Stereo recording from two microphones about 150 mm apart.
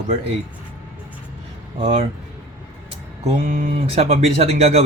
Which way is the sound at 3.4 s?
55° right (ahead or behind).